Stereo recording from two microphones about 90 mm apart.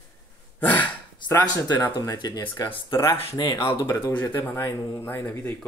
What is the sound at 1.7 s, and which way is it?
Speech, 45° left (ahead or behind).